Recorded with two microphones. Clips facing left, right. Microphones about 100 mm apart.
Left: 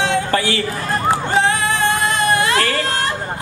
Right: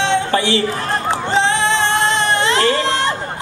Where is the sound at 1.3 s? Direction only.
25° right (ahead or behind).